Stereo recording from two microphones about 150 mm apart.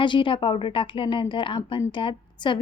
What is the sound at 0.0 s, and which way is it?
A woman's voice, 35° left (ahead or behind).